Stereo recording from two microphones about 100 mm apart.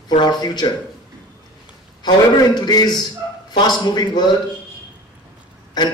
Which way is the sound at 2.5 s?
45° left (ahead or behind).